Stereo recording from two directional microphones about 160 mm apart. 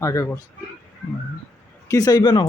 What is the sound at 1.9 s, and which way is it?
Speech, 25° left (ahead or behind).